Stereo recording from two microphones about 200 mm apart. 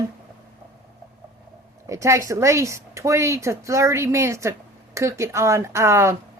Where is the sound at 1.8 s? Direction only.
15° right (ahead or behind).